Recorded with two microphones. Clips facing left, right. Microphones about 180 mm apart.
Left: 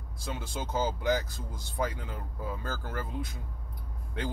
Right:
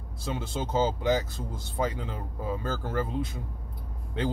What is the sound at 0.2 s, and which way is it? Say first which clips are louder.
Speech: right 5 dB; 25° right (ahead or behind).